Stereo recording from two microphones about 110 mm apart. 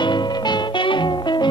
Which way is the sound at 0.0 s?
45° left (ahead or behind).